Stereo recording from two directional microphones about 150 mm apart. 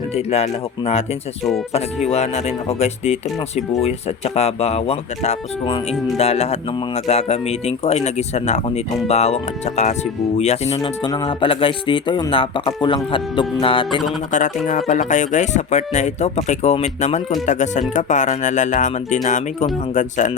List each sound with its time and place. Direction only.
0.3 s speech: 45° left (ahead or behind)
2.0 s speech: 45° left (ahead or behind)
10.8 s speech: 25° left (ahead or behind)
14.3 s speech: 55° left (ahead or behind)